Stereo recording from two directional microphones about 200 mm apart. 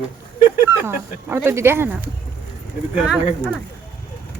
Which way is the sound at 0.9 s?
10° right (ahead or behind).